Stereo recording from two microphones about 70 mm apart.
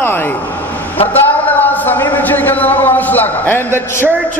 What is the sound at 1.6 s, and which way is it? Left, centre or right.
A man's voice, left.